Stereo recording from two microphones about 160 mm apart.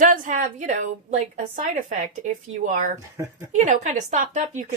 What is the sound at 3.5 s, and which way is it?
A woman's voice, 50° right (ahead or behind).